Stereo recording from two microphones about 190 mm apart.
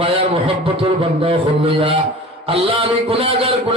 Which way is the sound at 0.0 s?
30° right (ahead or behind).